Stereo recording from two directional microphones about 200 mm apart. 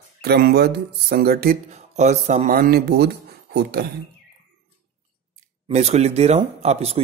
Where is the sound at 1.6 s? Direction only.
35° right (ahead or behind); by 3.9 s 55° right (ahead or behind).